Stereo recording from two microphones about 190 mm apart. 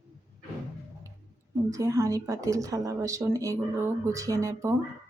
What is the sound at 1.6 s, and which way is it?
Speech, 15° right (ahead or behind).